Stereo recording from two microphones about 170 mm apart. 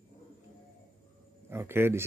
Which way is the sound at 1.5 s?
15° right (ahead or behind).